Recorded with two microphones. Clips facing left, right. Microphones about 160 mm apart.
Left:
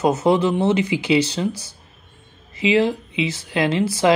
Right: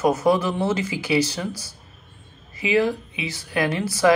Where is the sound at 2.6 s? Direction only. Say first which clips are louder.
Left 3 dB; 25° left (ahead or behind).